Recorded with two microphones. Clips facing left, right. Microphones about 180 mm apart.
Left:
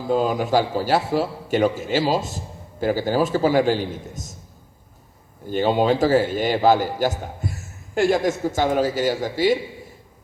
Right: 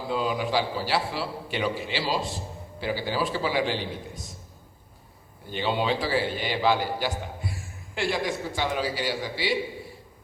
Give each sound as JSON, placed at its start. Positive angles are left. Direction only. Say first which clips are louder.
{"t": 0.1, "sound": "a man's voice", "louder": "left 7 dB", "side_deg": 45}
{"t": 5.5, "sound": "a man's voice", "louder": "left 8 dB", "side_deg": 45}